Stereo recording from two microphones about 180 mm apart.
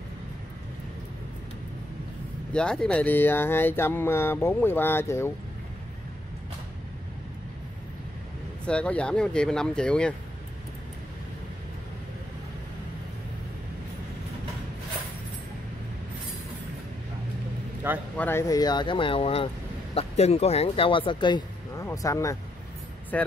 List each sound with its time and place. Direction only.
2.5 s speech: 5° left (ahead or behind)
8.6 s speech: 5° left (ahead or behind)
18.1 s speech: 10° left (ahead or behind)
18.5 s speech: 20° left (ahead or behind)